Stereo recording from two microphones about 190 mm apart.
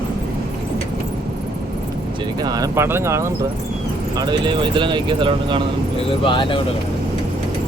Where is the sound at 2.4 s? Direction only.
20° right (ahead or behind).